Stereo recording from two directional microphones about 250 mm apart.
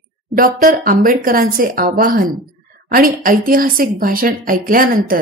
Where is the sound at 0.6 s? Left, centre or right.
Right.